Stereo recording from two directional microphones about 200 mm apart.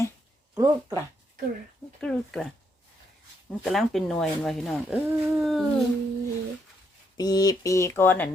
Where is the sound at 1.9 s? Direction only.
5° left (ahead or behind).